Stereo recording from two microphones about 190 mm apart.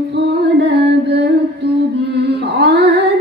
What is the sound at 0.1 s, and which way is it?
Music, 60° right (ahead or behind).